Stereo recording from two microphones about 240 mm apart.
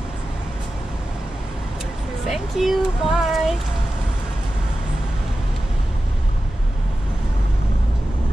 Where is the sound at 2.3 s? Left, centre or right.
Centre.